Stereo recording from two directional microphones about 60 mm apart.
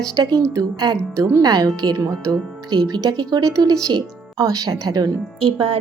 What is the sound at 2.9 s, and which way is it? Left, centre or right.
A woman's voice, right.